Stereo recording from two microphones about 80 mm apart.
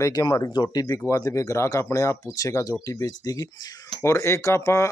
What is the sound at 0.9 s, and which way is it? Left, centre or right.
Speech, left.